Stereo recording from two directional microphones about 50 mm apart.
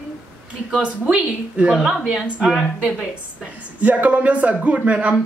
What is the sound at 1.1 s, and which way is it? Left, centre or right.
Speech, right.